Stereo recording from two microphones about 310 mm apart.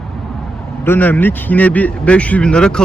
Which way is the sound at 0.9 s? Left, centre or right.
Centre.